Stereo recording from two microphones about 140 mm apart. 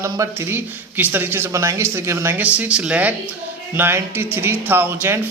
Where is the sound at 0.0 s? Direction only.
20° right (ahead or behind).